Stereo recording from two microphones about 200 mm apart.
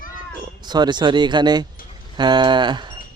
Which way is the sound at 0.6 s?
20° right (ahead or behind).